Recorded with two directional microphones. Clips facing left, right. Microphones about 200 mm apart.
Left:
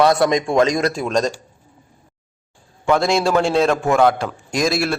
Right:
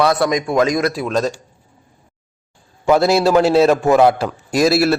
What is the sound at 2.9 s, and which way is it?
A man's voice, 5° right (ahead or behind).